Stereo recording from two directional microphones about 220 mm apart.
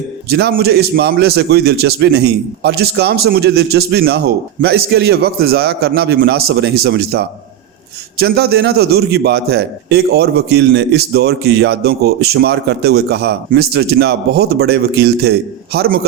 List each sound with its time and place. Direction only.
0.3 s a man's voice: 45° right (ahead or behind)